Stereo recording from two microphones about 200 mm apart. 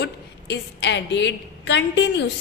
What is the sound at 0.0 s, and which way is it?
A woman's voice, 60° left (ahead or behind).